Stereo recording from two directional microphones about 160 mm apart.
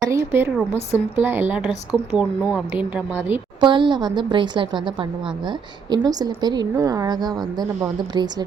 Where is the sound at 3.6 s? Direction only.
30° right (ahead or behind).